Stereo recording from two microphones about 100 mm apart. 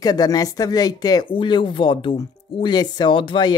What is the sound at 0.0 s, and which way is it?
Speech, 40° left (ahead or behind).